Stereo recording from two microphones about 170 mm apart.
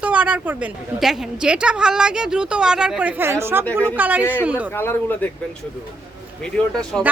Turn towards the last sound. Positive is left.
turn(degrees=5)  # may be behind; listen again after turning